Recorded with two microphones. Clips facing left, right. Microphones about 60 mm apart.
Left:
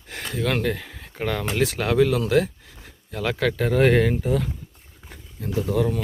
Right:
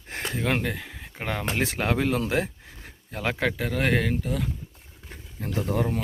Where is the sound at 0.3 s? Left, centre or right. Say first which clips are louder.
Left 2 dB; right.